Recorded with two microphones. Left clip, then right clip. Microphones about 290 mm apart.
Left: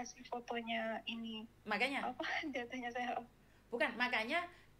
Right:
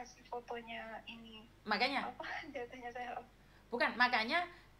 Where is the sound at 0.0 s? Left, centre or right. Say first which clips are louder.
Left 1 dB; left.